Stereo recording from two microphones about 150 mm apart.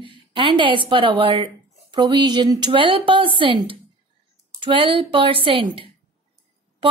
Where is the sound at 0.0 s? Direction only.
35° right (ahead or behind).